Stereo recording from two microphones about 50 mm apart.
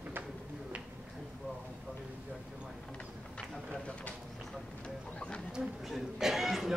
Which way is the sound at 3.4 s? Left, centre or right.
Left.